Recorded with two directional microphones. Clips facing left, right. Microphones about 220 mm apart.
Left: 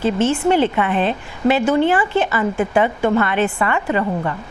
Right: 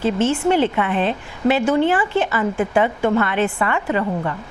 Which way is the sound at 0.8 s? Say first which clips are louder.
Left 1 dB; 20° left (ahead or behind).